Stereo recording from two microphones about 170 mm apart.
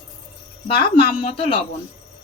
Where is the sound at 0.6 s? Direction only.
30° left (ahead or behind).